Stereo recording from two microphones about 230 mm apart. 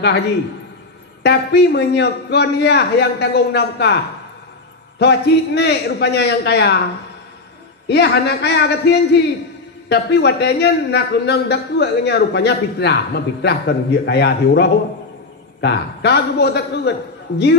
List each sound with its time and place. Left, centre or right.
1.2 s a man's voice: left
7.9 s a man's voice: left